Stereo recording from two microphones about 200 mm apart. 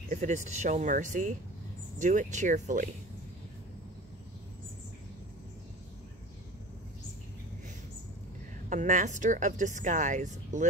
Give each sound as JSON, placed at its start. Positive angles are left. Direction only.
{"t": 0.1, "sound": "a woman's voice", "side_deg": -35}
{"t": 8.6, "sound": "a woman's voice", "side_deg": -40}